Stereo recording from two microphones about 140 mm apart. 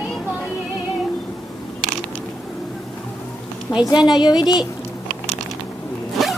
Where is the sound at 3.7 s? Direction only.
30° left (ahead or behind).